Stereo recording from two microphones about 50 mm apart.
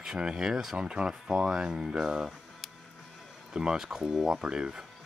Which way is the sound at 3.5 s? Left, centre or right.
Centre.